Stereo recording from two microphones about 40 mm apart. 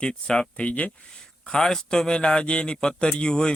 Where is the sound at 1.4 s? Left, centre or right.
Centre.